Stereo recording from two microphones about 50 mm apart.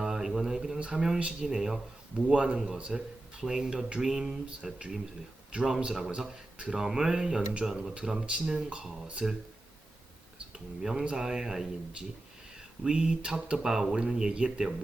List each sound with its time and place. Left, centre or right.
0.0 s a sound: centre
0.9 s speech: centre
10.5 s speech: centre